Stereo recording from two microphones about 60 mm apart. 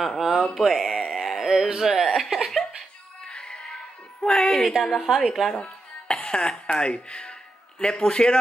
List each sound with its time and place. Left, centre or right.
0.0 s a sound: centre
3.3 s music: centre
4.2 s a woman's voice: centre
5.0 s a woman's voice: centre
5.6 s music: centre
7.8 s a man's voice: centre